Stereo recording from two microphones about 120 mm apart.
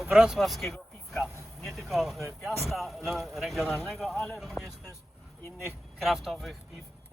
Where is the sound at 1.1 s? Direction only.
20° left (ahead or behind).